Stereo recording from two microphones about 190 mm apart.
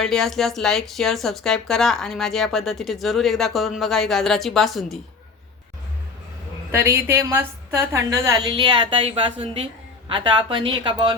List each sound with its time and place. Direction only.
0.0 s speech: centre (ahead or behind)
6.7 s a woman's voice: 15° right (ahead or behind)